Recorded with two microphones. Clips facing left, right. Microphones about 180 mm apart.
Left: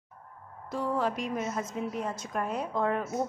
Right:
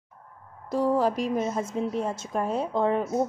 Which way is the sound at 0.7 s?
35° right (ahead or behind).